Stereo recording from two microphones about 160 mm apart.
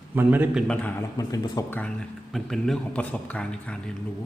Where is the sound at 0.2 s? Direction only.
10° right (ahead or behind).